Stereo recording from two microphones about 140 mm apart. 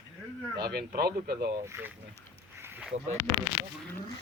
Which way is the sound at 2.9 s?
55° right (ahead or behind).